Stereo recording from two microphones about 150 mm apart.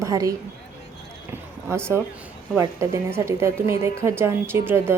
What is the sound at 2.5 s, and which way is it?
A woman's voice, 20° right (ahead or behind).